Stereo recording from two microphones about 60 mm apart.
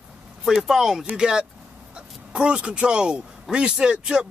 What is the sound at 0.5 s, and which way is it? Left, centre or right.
Speech, centre.